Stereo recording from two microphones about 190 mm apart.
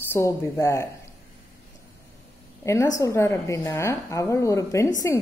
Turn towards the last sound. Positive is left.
turn(degrees=15)  # may be behind; listen again after turning